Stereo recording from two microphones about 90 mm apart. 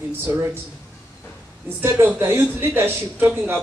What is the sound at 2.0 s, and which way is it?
A man's voice, 25° right (ahead or behind).